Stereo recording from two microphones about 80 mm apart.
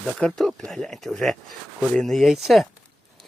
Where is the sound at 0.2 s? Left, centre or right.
Centre.